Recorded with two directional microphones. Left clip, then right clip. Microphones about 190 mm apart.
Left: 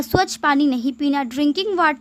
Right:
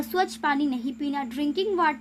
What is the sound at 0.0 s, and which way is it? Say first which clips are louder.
Speech: left 7 dB; 40° left (ahead or behind).